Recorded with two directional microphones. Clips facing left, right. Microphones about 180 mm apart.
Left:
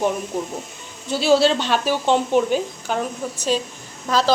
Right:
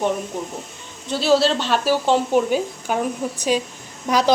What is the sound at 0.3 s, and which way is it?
A woman's voice, 5° left (ahead or behind).